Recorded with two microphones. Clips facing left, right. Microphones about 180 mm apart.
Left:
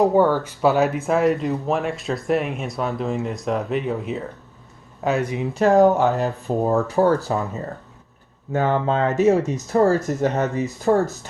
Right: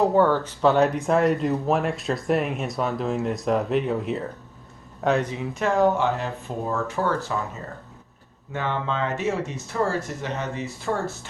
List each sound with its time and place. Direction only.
0.0 s speech: 15° left (ahead or behind)
5.5 s speech: 40° left (ahead or behind)
8.5 s speech: 40° left (ahead or behind)